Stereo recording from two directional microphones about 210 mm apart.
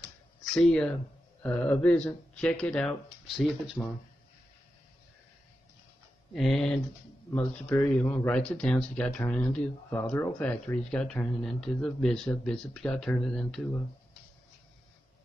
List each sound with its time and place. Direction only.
0.6 s a man's voice: 5° left (ahead or behind)
6.3 s a man's voice: centre (ahead or behind)